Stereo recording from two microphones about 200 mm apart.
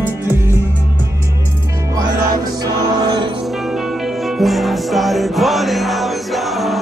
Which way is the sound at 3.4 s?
Centre (ahead or behind).